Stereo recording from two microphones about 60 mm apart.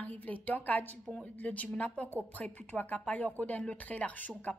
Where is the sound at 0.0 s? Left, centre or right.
Left.